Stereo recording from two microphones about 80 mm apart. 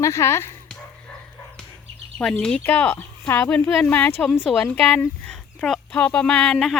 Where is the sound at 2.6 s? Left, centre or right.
Left.